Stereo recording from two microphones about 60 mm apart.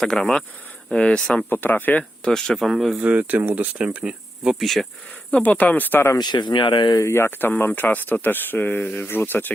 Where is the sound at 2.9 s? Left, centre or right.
Right.